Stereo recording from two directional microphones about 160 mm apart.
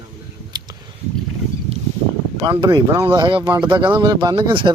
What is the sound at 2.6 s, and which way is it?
Speech, 25° right (ahead or behind).